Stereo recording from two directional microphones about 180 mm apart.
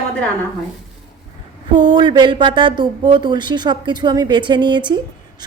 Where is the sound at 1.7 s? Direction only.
25° right (ahead or behind).